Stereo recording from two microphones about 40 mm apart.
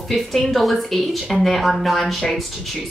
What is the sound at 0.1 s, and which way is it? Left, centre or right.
Speech, centre.